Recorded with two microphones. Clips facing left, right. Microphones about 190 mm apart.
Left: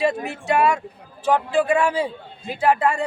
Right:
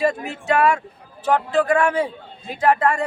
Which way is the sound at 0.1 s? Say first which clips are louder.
Even; 15° left (ahead or behind).